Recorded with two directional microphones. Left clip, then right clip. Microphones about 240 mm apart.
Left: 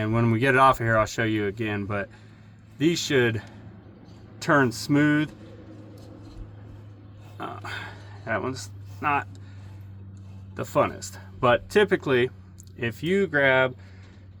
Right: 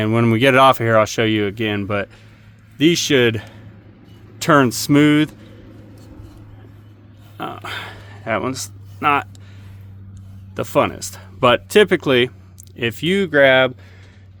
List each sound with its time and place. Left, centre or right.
0.0 s speech: right
1.6 s speech: right
2.8 s speech: right
7.3 s a sound: right
10.5 s speech: right